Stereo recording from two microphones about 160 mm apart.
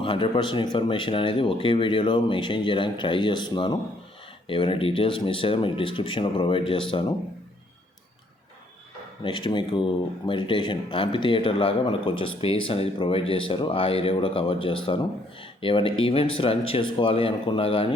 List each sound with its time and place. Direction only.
0.0 s speech: 35° left (ahead or behind)
9.2 s speech: 30° left (ahead or behind)